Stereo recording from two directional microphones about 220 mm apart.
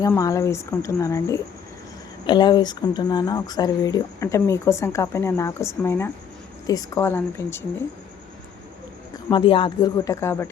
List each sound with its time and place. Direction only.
0.0 s speech: 15° left (ahead or behind)
9.1 s speech: 20° left (ahead or behind)